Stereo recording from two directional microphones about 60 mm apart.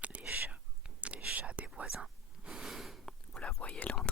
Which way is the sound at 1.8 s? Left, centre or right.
Centre.